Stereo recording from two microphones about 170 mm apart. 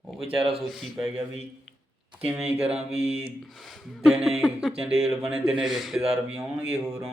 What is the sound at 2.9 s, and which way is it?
Speech, 35° right (ahead or behind).